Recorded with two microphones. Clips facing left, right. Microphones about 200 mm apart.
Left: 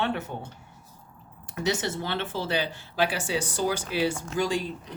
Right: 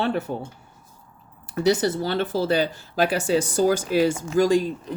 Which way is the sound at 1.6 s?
35° right (ahead or behind).